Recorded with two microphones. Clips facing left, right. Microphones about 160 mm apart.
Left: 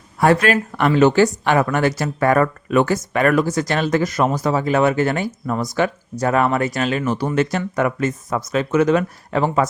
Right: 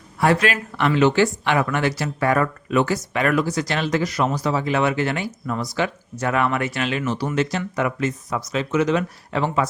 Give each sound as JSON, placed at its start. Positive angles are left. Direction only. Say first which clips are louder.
{"t": 0.2, "sound": "speech", "louder": "left 4 dB", "side_deg": 45}